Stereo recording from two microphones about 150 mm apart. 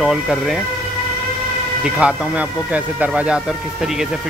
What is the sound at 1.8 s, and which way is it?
Speech, 5° right (ahead or behind).